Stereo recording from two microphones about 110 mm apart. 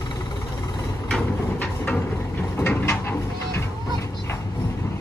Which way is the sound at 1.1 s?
15° left (ahead or behind).